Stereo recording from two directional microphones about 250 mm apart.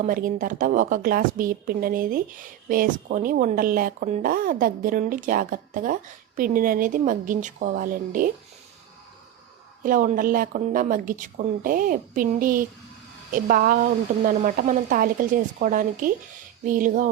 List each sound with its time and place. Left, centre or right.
0.0 s a woman's voice: right
9.8 s a woman's voice: right